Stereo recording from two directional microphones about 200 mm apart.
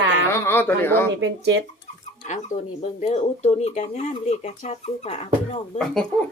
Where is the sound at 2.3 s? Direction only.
35° left (ahead or behind).